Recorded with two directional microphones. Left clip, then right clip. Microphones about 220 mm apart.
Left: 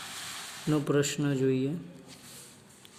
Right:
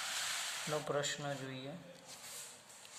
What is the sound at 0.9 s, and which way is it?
Speech, 45° left (ahead or behind).